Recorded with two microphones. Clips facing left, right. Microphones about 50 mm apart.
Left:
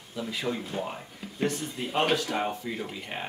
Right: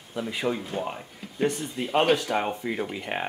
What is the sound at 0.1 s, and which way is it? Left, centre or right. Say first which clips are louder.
Speech: right 4 dB; right.